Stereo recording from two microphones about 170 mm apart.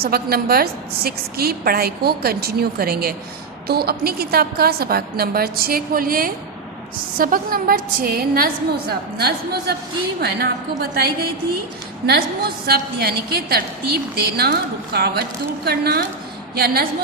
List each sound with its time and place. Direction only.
0.0 s a woman's voice: 65° right (ahead or behind)
12.6 s a woman's voice: 65° right (ahead or behind)